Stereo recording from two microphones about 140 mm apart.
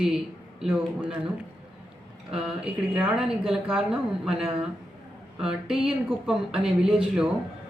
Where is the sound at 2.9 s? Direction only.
5° right (ahead or behind).